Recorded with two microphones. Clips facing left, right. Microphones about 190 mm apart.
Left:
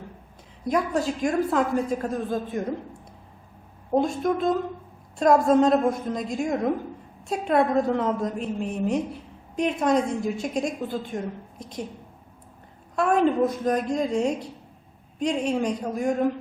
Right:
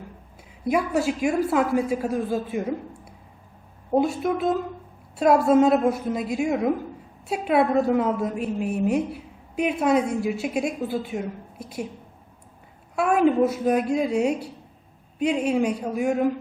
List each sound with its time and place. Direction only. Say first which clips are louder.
0.7 s a woman's voice: right 2 dB; 10° right (ahead or behind)
13.0 s a woman's voice: right 2 dB; 5° right (ahead or behind)